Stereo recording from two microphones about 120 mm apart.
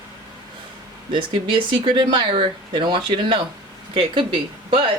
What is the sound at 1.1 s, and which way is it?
Speech, 45° right (ahead or behind).